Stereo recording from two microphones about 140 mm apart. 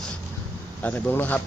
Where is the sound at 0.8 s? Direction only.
10° left (ahead or behind).